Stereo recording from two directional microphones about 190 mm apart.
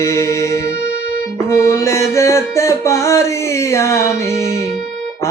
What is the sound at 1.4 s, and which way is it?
Music, 15° left (ahead or behind).